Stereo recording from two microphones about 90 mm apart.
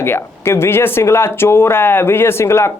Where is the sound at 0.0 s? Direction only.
25° left (ahead or behind).